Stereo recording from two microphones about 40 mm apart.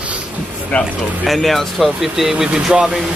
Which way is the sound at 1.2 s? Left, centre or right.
Centre.